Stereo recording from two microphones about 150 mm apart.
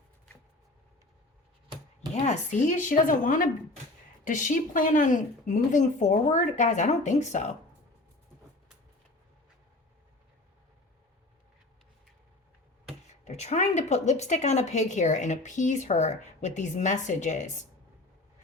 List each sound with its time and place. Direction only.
2.1 s a woman's voice: 50° left (ahead or behind)
13.2 s a woman's voice: 50° left (ahead or behind)